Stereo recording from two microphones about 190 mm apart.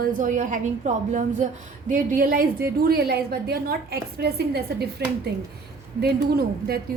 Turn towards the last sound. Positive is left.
turn(degrees=-55)  # may be behind; listen again after turning